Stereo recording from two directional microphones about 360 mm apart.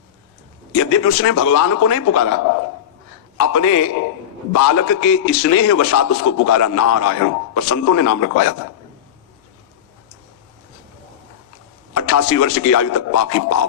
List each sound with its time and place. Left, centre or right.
0.8 s a man's voice: left
3.4 s a man's voice: left
11.9 s a man's voice: left